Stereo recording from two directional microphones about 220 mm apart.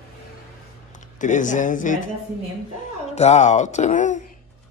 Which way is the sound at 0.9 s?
35° left (ahead or behind).